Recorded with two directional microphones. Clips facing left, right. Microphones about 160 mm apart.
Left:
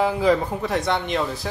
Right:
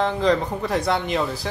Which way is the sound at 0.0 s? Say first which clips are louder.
Left 1 dB; 5° left (ahead or behind).